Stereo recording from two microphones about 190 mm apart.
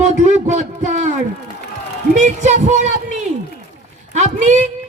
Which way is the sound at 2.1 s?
40° right (ahead or behind).